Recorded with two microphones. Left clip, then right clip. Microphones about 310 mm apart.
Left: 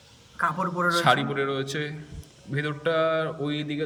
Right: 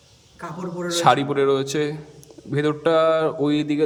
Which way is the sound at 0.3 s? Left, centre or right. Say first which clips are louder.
Left 6 dB; left.